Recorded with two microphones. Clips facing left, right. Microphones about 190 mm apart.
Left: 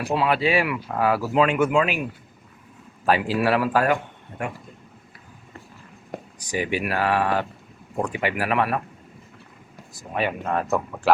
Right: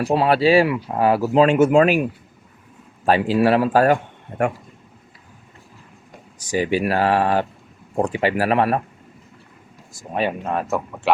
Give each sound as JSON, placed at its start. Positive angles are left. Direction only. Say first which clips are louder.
{"t": 0.1, "sound": "speech", "louder": "right 5 dB", "side_deg": -35}
{"t": 3.1, "sound": "a man's voice", "louder": "right 4 dB", "side_deg": -30}
{"t": 6.5, "sound": "speech", "louder": "right 5 dB", "side_deg": -30}
{"t": 10.4, "sound": "speech", "louder": "right 1 dB", "side_deg": -10}
{"t": 11.1, "sound": "speech", "louder": "even", "side_deg": 0}